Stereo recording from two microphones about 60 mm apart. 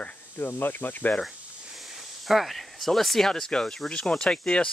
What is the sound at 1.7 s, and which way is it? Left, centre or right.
Speech, centre.